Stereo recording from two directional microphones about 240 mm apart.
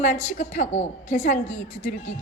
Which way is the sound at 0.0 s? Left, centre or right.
Left.